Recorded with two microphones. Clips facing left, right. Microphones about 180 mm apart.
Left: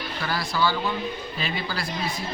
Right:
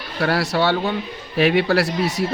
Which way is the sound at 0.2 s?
70° right (ahead or behind).